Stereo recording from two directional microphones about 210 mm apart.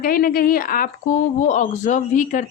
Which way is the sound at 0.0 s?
45° left (ahead or behind).